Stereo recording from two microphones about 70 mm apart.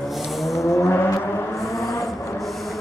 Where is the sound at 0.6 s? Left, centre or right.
Left.